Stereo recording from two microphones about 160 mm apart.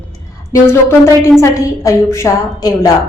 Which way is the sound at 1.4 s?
20° left (ahead or behind).